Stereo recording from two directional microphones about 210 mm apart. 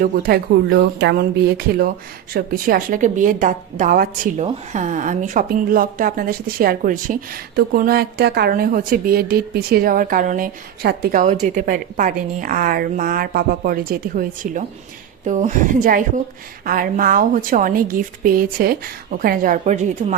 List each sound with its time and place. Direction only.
0.0 s a woman's voice: 45° right (ahead or behind)